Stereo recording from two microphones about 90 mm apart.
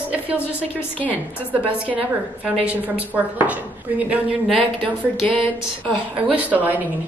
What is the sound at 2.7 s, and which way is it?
Speech, 15° right (ahead or behind).